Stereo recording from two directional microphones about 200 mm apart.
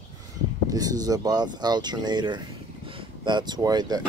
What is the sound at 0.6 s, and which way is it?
Speech, 20° right (ahead or behind).